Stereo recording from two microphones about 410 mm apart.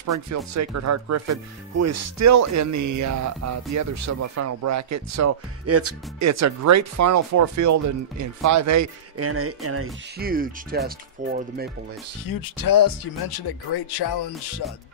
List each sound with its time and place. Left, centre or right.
0.0 s speech: right
12.3 s speech: left